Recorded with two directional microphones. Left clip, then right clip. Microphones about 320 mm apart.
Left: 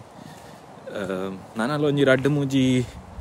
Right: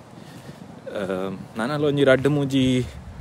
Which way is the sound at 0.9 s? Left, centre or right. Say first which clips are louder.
Right 2 dB; centre.